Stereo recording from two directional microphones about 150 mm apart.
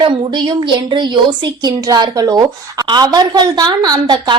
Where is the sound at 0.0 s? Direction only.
30° right (ahead or behind).